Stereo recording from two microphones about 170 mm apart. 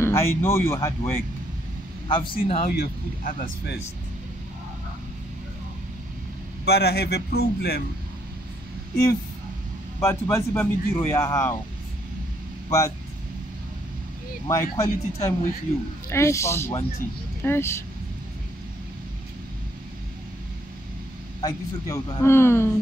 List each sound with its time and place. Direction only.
0.0 s speech: 15° left (ahead or behind)
2.0 s a man's voice: 30° left (ahead or behind)
2.7 s a man's voice: 65° left (ahead or behind)
6.6 s a man's voice: 75° left (ahead or behind)
9.9 s speech: 15° left (ahead or behind)
12.6 s speech: 20° left (ahead or behind)
14.5 s speech: 20° left (ahead or behind)
21.4 s speech: 20° left (ahead or behind)